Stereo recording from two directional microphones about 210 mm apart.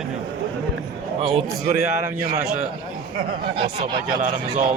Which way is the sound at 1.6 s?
50° left (ahead or behind).